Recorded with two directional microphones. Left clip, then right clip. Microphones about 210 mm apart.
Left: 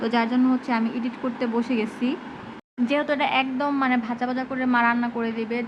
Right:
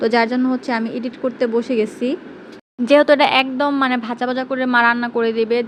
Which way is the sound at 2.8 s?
25° right (ahead or behind).